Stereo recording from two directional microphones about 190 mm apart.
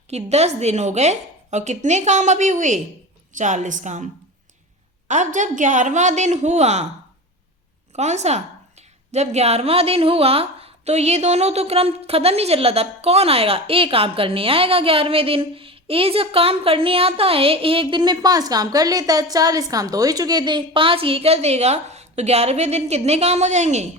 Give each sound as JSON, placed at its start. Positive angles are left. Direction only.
{"t": 0.1, "sound": "a woman's voice", "side_deg": -35}
{"t": 5.0, "sound": "a woman's voice", "side_deg": -40}
{"t": 7.9, "sound": "a woman's voice", "side_deg": -35}